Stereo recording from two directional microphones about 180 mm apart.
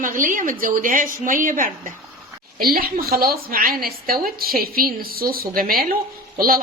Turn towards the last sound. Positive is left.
turn(degrees=-55)  # may be behind; listen again after turning